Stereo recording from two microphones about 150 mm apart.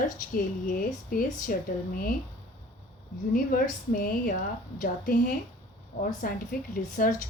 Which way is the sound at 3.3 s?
65° left (ahead or behind).